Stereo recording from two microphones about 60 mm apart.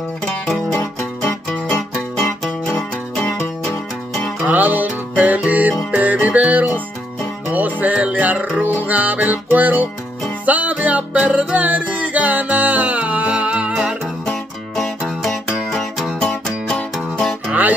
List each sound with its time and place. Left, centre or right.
1.5 s music: left
4.5 s music: right
14.2 s music: centre
17.5 s music: right